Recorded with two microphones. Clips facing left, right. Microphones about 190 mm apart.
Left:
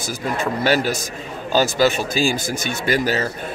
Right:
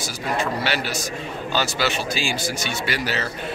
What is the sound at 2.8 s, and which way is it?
Speech, 45° left (ahead or behind).